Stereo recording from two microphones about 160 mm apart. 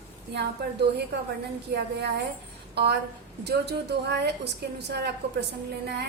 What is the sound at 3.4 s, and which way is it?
A woman's voice, 90° right.